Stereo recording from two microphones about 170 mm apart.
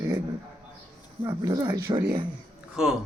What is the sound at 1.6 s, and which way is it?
Speech, 20° right (ahead or behind).